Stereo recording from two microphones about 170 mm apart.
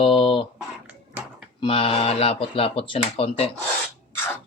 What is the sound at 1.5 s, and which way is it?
Speech, 30° left (ahead or behind).